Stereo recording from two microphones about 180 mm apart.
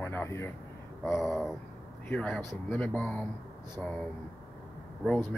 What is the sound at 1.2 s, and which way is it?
Speech, centre (ahead or behind).